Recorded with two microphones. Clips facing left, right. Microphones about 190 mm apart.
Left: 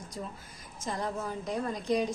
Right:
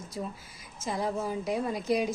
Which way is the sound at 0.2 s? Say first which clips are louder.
Right 4 dB; 10° right (ahead or behind).